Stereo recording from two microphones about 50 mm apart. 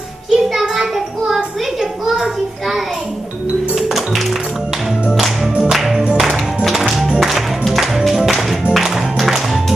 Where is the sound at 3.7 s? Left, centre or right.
Centre.